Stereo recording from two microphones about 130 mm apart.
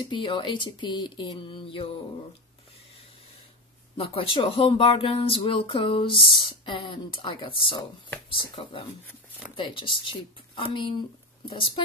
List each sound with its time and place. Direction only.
0.1 s speech: 35° left (ahead or behind)
3.9 s speech: 45° left (ahead or behind)
9.6 s speech: 40° left (ahead or behind)